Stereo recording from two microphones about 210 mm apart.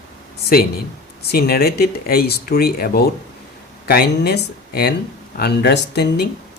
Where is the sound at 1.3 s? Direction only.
45° left (ahead or behind).